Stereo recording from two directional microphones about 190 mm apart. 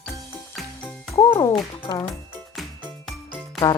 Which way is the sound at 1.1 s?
15° left (ahead or behind).